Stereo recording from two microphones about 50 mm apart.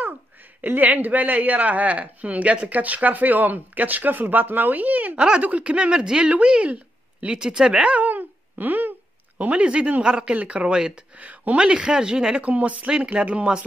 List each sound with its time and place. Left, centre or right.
0.6 s speech: right
8.0 s a sound: right
9.4 s speech: right
11.6 s speech: centre
12.4 s speech: right